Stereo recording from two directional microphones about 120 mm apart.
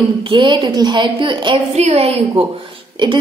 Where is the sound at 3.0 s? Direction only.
40° right (ahead or behind).